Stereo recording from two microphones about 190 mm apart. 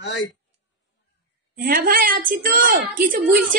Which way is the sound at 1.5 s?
50° right (ahead or behind).